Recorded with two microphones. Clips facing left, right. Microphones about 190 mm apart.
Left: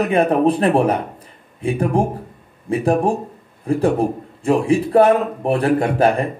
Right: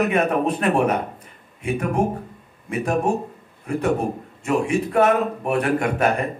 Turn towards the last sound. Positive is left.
turn(degrees=30)  # may be behind; listen again after turning